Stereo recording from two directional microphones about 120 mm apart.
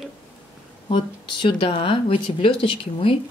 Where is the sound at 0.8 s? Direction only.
40° left (ahead or behind).